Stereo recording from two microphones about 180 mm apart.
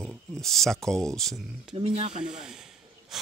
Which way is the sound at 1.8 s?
35° right (ahead or behind).